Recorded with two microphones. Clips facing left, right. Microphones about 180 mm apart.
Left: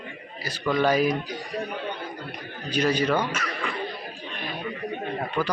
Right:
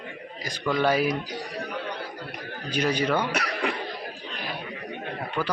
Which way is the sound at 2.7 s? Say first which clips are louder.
Left 2 dB; 10° right (ahead or behind).